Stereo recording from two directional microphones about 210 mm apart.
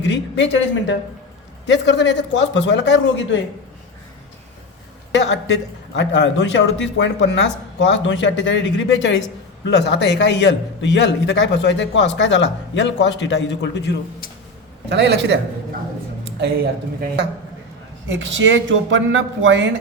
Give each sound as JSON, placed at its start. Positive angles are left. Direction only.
{"t": 0.0, "sound": "a woman's voice", "side_deg": 60}
{"t": 5.1, "sound": "a man's voice", "side_deg": 55}
{"t": 14.8, "sound": "speech", "side_deg": -55}
{"t": 18.1, "sound": "speech", "side_deg": -60}